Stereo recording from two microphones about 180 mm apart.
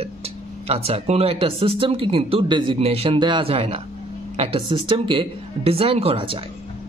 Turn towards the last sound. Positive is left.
turn(degrees=-30)  # may be behind; listen again after turning